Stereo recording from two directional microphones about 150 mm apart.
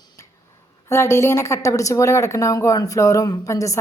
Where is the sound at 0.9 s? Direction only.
20° left (ahead or behind).